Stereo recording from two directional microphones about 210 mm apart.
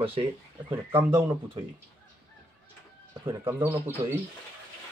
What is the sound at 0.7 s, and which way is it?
Speech, 10° right (ahead or behind).